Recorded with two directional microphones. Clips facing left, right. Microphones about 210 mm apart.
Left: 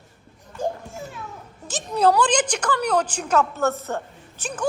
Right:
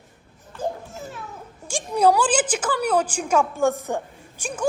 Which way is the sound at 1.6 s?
10° right (ahead or behind).